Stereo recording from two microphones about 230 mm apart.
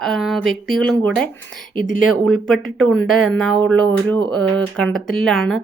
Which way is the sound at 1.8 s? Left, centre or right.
Right.